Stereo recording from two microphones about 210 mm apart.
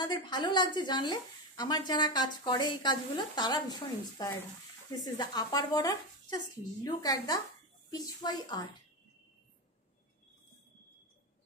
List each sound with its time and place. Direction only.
0.0 s a woman's voice: 20° left (ahead or behind)